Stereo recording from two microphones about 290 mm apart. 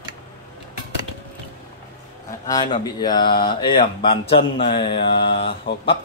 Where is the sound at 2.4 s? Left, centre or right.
Centre.